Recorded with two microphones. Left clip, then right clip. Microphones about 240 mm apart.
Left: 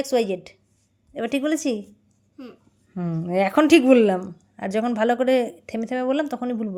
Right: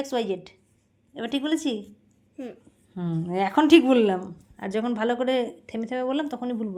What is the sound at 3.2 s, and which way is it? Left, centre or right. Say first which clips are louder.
Speech: left 5 dB; left.